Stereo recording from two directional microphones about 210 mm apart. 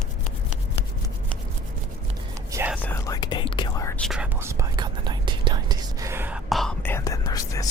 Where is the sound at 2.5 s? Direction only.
10° right (ahead or behind).